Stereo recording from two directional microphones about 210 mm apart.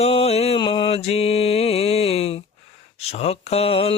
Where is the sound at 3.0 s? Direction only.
30° left (ahead or behind).